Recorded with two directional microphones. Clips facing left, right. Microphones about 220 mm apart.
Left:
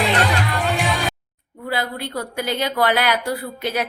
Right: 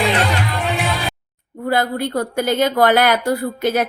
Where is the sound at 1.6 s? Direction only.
45° right (ahead or behind).